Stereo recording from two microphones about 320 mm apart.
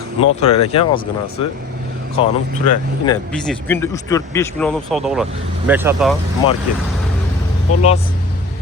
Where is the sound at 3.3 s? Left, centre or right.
Centre.